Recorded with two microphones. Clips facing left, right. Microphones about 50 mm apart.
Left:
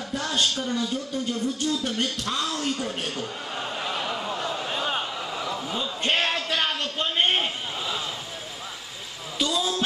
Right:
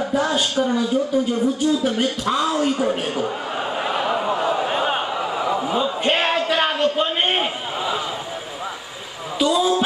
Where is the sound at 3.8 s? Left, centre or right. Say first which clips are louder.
Right 9 dB; right.